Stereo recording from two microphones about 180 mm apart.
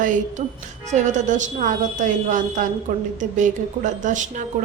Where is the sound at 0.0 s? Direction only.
45° right (ahead or behind).